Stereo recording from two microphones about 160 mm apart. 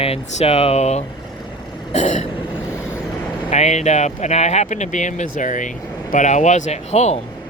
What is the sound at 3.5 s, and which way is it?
Speech, 45° left (ahead or behind).